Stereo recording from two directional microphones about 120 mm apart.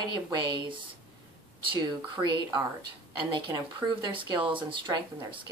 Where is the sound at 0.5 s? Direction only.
40° right (ahead or behind).